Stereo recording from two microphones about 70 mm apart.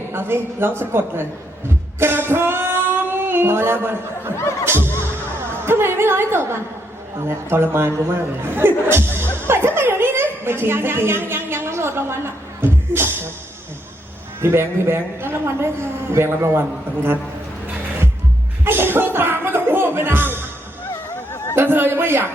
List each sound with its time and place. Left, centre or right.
0.1 s a man's voice: right
2.0 s singing: right
5.6 s a man's voice: right
14.4 s a man's voice: right
18.6 s music: right
20.9 s a sound: left
21.5 s a man's voice: right